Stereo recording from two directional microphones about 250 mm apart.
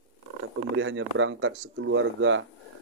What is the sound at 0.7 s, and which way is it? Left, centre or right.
A man's voice, right.